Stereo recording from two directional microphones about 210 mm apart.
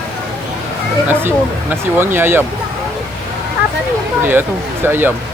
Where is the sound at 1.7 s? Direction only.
10° right (ahead or behind).